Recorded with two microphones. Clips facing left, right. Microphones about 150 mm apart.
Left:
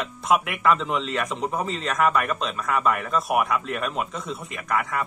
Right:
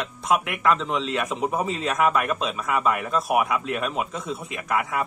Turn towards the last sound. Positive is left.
turn(degrees=-5)  # may be behind; listen again after turning